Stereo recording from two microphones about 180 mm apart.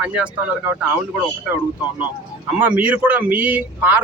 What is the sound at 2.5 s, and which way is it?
Speech, 5° right (ahead or behind).